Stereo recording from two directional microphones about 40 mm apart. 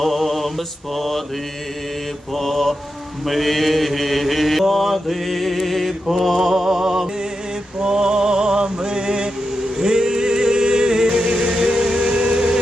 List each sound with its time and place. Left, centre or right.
0.0 s mantra: centre
2.3 s mantra: centre
7.8 s a sound: centre
9.7 s music: centre